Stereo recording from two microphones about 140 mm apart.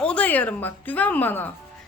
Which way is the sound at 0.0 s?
10° left (ahead or behind).